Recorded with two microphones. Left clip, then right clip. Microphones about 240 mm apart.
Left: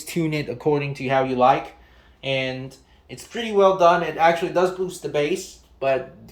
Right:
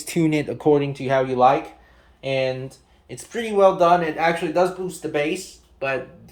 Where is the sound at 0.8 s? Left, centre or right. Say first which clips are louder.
Right 2 dB; right.